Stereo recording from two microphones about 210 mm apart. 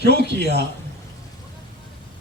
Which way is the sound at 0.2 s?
55° right (ahead or behind).